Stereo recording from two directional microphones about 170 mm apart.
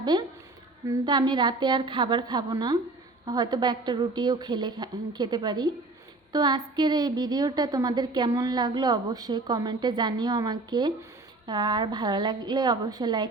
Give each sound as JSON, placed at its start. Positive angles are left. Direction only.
{"t": 0.0, "sound": "a woman's voice", "side_deg": -25}